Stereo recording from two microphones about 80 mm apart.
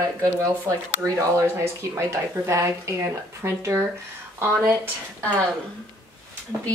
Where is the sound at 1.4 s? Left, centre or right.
Right.